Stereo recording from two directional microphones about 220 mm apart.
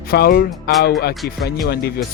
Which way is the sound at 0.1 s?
45° left (ahead or behind).